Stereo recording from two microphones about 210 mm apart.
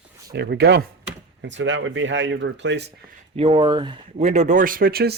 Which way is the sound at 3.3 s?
25° right (ahead or behind).